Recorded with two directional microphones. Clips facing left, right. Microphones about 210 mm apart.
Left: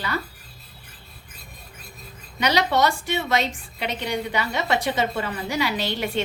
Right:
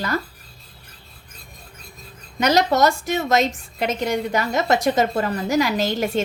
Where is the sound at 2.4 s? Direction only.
45° right (ahead or behind).